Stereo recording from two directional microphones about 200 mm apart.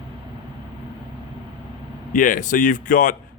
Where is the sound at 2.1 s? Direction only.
40° left (ahead or behind).